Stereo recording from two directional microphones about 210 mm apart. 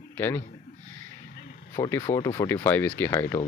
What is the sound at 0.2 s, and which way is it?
Speech, 10° left (ahead or behind).